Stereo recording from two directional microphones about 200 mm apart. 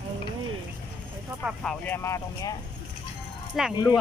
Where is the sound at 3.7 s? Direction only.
20° left (ahead or behind).